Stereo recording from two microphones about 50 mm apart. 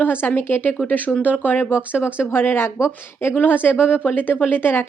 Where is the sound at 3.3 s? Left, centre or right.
Left.